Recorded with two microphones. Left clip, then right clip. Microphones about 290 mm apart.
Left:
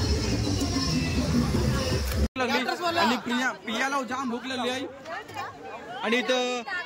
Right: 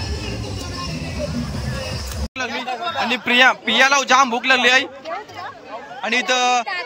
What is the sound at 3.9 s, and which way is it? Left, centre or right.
Speech, right.